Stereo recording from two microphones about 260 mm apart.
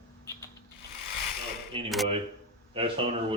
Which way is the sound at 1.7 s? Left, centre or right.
Centre.